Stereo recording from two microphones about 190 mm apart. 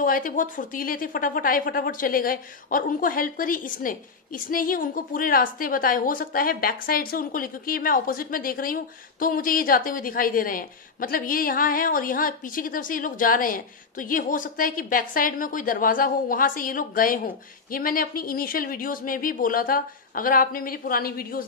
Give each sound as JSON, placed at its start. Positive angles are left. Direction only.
{"t": 0.0, "sound": "a woman's voice", "side_deg": 45}